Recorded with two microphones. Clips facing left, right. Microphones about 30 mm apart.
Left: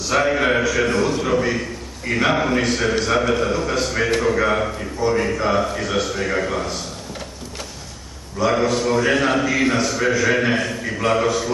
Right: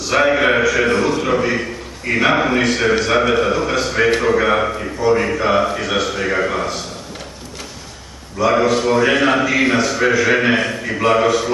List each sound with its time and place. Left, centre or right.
0.1 s a sound: right
1.2 s a man's voice: right
8.4 s a man's voice: centre